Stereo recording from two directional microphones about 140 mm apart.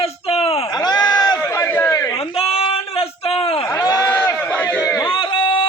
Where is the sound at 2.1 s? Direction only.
45° left (ahead or behind).